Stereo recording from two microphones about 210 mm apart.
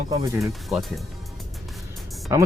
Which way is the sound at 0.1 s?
15° right (ahead or behind).